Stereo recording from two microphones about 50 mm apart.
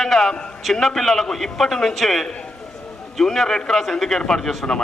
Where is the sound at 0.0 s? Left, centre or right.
Centre.